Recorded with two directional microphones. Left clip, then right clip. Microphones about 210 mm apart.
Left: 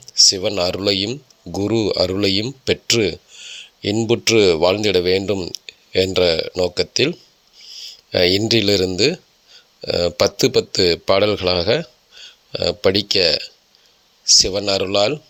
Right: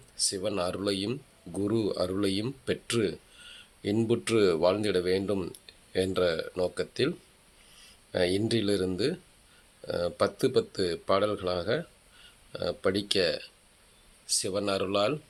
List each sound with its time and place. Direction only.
0.3 s speech: 25° left (ahead or behind)
8.1 s speech: 30° left (ahead or behind)